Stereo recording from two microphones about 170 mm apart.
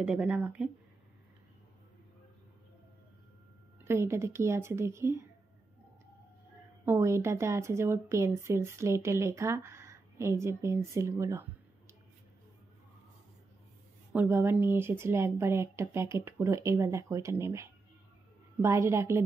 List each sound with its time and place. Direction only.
0.0 s a woman's voice: 5° right (ahead or behind)
3.8 s a woman's voice: 15° right (ahead or behind)
6.9 s a woman's voice: 15° right (ahead or behind)
14.1 s a woman's voice: 10° right (ahead or behind)